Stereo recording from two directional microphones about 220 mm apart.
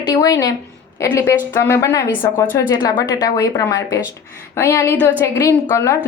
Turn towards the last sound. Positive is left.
turn(degrees=15)  # may be behind; listen again after turning